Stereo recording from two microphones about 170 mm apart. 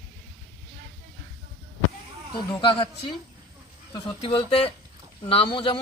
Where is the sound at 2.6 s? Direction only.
30° left (ahead or behind).